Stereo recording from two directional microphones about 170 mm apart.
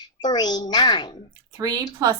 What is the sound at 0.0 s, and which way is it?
A child's voice, 25° left (ahead or behind).